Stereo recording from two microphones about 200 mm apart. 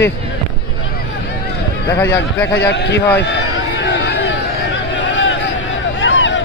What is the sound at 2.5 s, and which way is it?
Speech, 60° left (ahead or behind).